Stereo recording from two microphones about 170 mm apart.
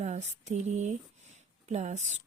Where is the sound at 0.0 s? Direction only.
45° right (ahead or behind).